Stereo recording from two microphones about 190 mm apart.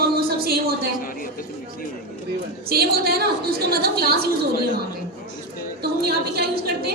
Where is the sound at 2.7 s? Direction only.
55° right (ahead or behind).